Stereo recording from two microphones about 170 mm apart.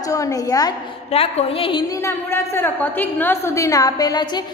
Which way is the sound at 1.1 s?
35° left (ahead or behind).